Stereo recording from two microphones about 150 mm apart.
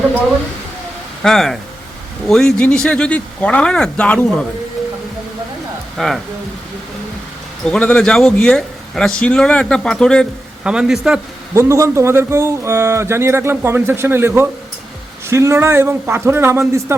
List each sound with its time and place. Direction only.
1.2 s speech: 5° left (ahead or behind)
6.0 s speech: centre (ahead or behind)
7.6 s speech: 5° left (ahead or behind)
11.5 s speech: 20° right (ahead or behind)